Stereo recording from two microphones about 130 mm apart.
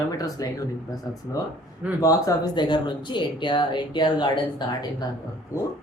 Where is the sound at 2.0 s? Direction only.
30° left (ahead or behind).